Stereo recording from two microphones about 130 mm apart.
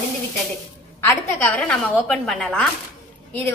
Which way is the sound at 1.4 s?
10° left (ahead or behind).